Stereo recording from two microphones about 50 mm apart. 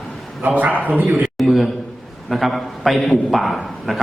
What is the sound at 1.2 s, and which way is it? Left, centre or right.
A man's voice, centre.